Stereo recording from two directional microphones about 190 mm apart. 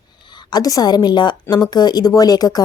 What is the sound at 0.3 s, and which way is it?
A woman's voice, 20° left (ahead or behind).